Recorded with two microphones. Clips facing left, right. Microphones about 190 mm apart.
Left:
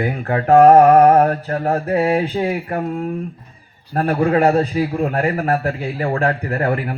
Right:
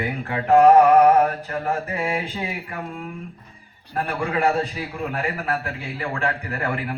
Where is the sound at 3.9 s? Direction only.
45° left (ahead or behind).